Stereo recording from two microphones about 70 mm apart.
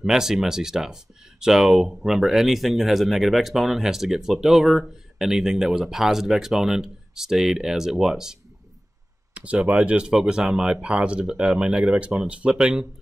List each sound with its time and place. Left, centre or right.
0.0 s speech: centre
9.3 s computer keyboard: centre
9.6 s speech: centre